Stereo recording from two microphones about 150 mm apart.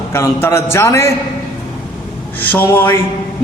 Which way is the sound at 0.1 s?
15° left (ahead or behind).